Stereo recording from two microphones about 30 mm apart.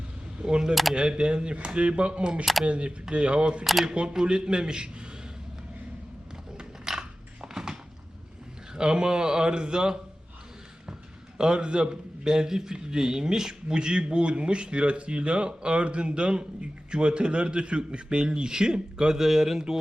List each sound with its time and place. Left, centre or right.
0.4 s speech: right
0.7 s speech: centre
0.9 s speech: right
2.4 s speech: centre
2.6 s a man's voice: right
6.9 s a sound: right
8.7 s a man's voice: right
11.3 s a man's voice: right
19.1 s speech: centre